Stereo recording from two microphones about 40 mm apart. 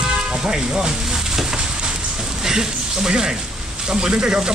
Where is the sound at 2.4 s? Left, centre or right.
Centre.